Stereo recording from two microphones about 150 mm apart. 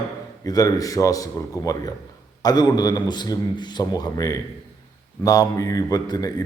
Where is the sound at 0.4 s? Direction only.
25° left (ahead or behind).